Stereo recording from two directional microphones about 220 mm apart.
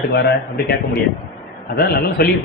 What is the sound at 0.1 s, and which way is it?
Speech, 50° left (ahead or behind).